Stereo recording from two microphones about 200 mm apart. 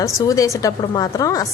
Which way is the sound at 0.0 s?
15° left (ahead or behind).